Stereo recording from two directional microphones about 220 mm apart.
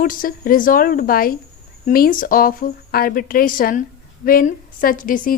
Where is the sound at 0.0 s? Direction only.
40° left (ahead or behind).